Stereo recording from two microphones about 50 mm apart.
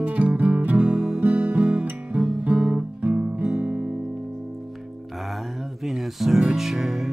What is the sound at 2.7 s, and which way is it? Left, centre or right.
Music, right.